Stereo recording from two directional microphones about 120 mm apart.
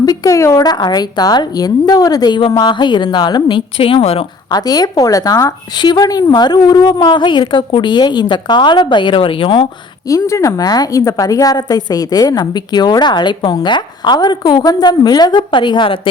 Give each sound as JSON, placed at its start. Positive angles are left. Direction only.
{"t": 0.0, "sound": "a woman's voice", "side_deg": 30}
{"t": 4.5, "sound": "a woman's voice", "side_deg": 30}
{"t": 10.1, "sound": "a woman's voice", "side_deg": 25}